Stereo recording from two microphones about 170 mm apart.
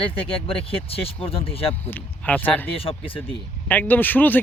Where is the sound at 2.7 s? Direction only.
35° left (ahead or behind).